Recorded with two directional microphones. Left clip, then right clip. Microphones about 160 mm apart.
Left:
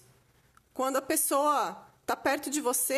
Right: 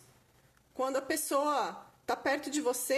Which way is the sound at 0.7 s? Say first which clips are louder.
Left 3 dB; 45° left (ahead or behind).